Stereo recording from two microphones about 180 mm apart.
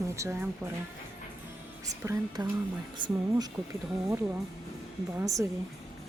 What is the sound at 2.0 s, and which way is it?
A woman's voice, 15° right (ahead or behind).